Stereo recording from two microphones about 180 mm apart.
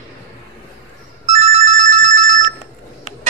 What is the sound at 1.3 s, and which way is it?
Telephone bell ringing, 35° right (ahead or behind).